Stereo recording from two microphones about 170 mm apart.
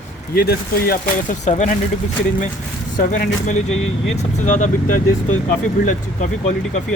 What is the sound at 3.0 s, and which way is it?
Speech, 50° left (ahead or behind).